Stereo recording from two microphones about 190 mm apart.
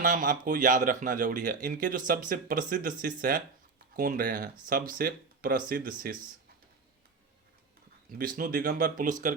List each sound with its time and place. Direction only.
0.0 s speech: 45° right (ahead or behind)
8.2 s speech: 50° right (ahead or behind)